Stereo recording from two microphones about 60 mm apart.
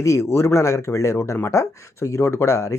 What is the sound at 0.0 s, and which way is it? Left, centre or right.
Speech, left.